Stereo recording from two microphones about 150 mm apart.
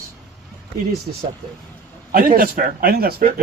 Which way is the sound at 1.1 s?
50° right (ahead or behind).